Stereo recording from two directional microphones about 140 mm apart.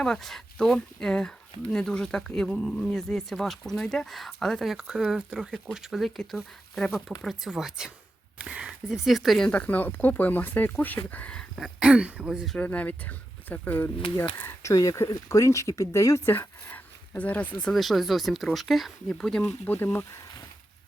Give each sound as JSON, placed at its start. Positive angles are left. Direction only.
{"t": 0.0, "sound": "speech", "side_deg": 5}
{"t": 11.8, "sound": "speech", "side_deg": -10}
{"t": 12.5, "sound": "speech", "side_deg": 10}